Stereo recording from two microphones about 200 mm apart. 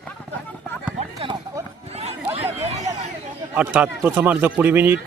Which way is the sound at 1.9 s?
30° right (ahead or behind).